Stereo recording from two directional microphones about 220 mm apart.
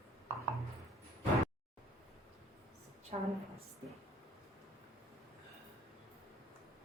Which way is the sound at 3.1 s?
30° right (ahead or behind).